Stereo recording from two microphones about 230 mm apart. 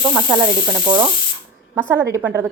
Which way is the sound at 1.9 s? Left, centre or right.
Centre.